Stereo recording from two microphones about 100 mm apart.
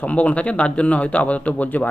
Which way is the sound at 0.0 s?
15° left (ahead or behind).